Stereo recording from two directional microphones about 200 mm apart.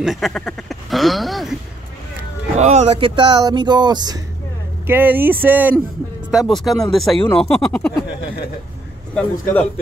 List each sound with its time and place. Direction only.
0.0 s a sound: centre (ahead or behind)
2.5 s speech: 35° right (ahead or behind)
4.8 s speech: 10° right (ahead or behind)
9.1 s a man's voice: 10° left (ahead or behind)